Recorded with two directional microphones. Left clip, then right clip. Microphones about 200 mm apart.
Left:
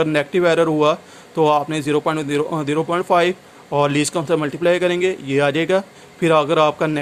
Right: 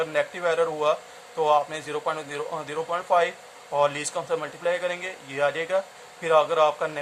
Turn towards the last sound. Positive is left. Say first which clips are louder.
# left 6 dB
turn(degrees=45)  # may be behind; listen again after turning